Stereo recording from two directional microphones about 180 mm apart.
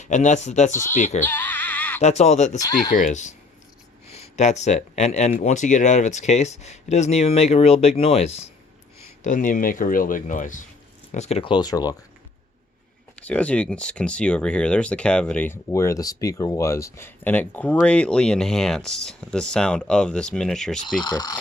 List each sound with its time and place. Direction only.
0.0 s speech: 40° left (ahead or behind)
1.2 s a sound: 10° left (ahead or behind)
2.0 s speech: 40° left (ahead or behind)
9.2 s speech: 45° left (ahead or behind); by 11.9 s 20° left (ahead or behind)
13.1 s speech: 5° left (ahead or behind)
21.0 s speech: 20° left (ahead or behind)